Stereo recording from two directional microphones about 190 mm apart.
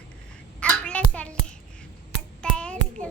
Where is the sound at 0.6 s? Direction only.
5° left (ahead or behind).